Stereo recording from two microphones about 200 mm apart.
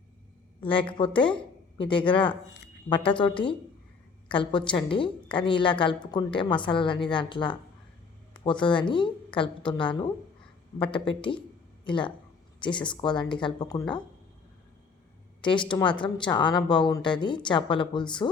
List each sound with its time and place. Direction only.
0.6 s a woman's voice: 25° left (ahead or behind)
15.4 s a woman's voice: 25° left (ahead or behind)